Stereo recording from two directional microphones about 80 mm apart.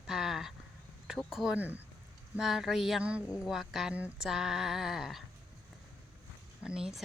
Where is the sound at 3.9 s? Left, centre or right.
Centre.